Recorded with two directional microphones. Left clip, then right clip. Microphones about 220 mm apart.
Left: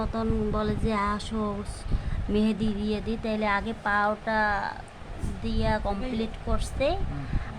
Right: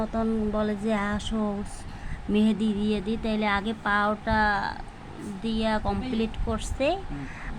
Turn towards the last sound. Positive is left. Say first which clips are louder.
# right 1 dB
turn(degrees=-10)  # may be behind; listen again after turning